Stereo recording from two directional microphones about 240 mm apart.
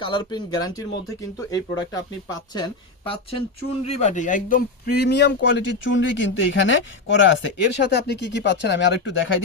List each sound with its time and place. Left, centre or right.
0.0 s speech: centre; by 9.4 s left